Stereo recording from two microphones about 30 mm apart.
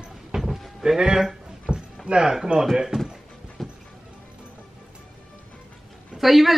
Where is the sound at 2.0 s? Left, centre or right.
Right.